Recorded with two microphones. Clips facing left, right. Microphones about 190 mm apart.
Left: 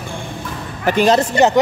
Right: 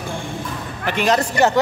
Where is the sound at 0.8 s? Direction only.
35° left (ahead or behind).